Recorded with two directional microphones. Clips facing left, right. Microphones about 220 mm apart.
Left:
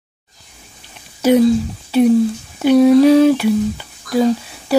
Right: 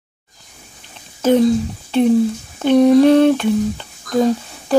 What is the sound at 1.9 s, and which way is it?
Speech, 5° left (ahead or behind).